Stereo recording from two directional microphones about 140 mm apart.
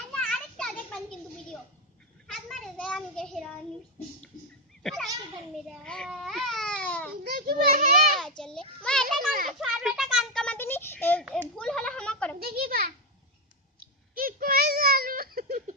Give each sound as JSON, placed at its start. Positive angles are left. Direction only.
{"t": 0.1, "sound": "children playing", "side_deg": 5}
{"t": 2.2, "sound": "child singing", "side_deg": 0}
{"t": 4.8, "sound": "a sound", "side_deg": 5}
{"t": 5.6, "sound": "baby cry", "side_deg": 5}
{"t": 7.3, "sound": "a child's voice", "side_deg": -90}
{"t": 8.4, "sound": "a sound", "side_deg": 5}
{"t": 11.3, "sound": "hands", "side_deg": 5}
{"t": 12.4, "sound": "a sound", "side_deg": -90}
{"t": 14.2, "sound": "giggle", "side_deg": -90}